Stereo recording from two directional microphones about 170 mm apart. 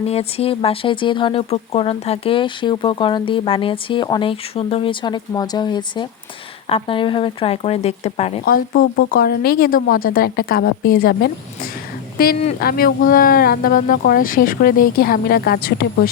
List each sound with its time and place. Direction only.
0.0 s speech: 35° left (ahead or behind)
8.4 s a woman's voice: 60° left (ahead or behind)